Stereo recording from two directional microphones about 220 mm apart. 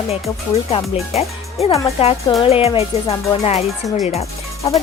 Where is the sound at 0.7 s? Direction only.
25° left (ahead or behind).